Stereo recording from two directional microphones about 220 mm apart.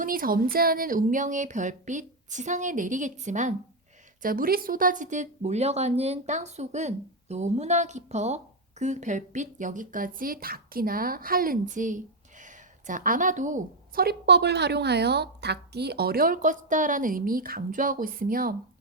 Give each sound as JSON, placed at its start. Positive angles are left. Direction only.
{"t": 0.0, "sound": "speech", "side_deg": -40}